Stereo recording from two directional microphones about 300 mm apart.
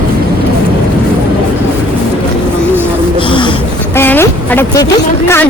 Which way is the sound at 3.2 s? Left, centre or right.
Centre.